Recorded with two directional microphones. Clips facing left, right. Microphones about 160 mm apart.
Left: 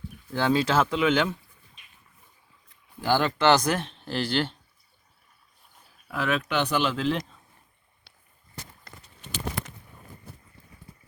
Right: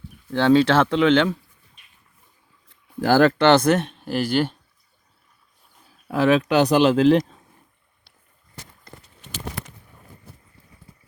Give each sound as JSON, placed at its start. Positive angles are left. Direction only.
{"t": 0.3, "sound": "speech", "side_deg": -30}
{"t": 3.0, "sound": "speech", "side_deg": -40}
{"t": 3.5, "sound": "speech", "side_deg": -25}
{"t": 4.0, "sound": "speech", "side_deg": -10}
{"t": 6.1, "sound": "speech", "side_deg": -35}
{"t": 6.9, "sound": "speech", "side_deg": -90}